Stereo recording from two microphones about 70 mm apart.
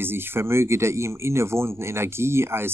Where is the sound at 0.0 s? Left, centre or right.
Right.